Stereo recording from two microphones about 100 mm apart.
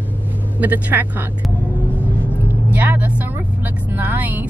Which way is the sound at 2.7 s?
15° right (ahead or behind).